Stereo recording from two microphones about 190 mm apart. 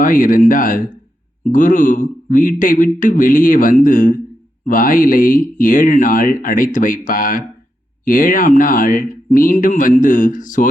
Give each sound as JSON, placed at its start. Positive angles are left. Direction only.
{"t": 0.0, "sound": "speech", "side_deg": 45}